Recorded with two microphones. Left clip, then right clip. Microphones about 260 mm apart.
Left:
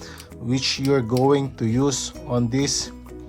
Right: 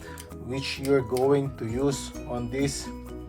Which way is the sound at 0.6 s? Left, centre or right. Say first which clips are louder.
Left 8 dB; left.